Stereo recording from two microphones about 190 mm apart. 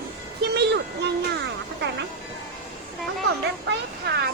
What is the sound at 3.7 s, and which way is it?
Speech, 60° right (ahead or behind).